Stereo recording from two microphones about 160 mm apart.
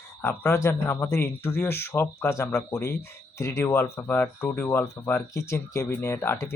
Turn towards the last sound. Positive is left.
turn(degrees=15)  # may be behind; listen again after turning